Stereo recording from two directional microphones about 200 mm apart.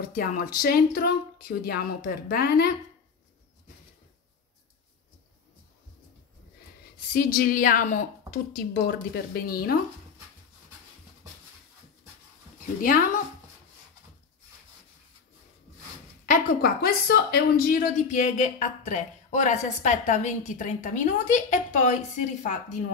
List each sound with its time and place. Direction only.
0.1 s a woman's voice: 45° left (ahead or behind)
7.1 s a woman's voice: 45° left (ahead or behind)
12.8 s a woman's voice: 45° left (ahead or behind)
16.3 s speech: 50° left (ahead or behind)